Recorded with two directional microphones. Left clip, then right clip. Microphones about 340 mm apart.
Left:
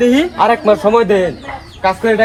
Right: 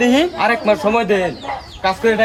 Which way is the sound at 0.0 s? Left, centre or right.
Centre.